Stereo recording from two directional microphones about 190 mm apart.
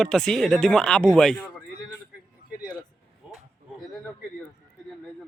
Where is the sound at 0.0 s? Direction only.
5° left (ahead or behind).